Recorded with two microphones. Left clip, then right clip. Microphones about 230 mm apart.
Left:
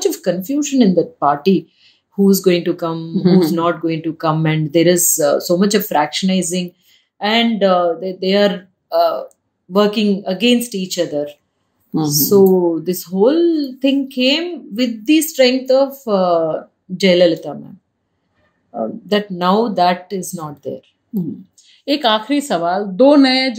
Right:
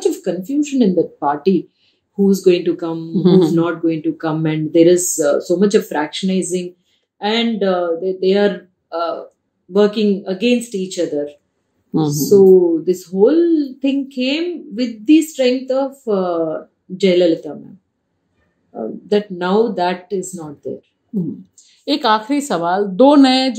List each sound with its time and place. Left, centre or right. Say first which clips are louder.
0.0 s speech: left 1 dB; left
3.2 s speech: right 2 dB; centre
3.5 s speech: even; left
8.8 s a sound: left 7 dB; left
9.8 s speech: right 1 dB; left
12.8 s speech: right 1 dB; left
18.7 s speech: even; left
21.1 s speech: even; centre